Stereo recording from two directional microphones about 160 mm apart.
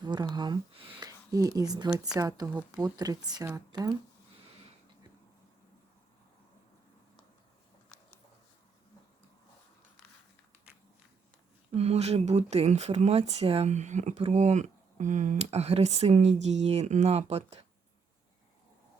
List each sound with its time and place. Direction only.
0.0 s speech: 25° right (ahead or behind)
11.7 s speech: 40° right (ahead or behind)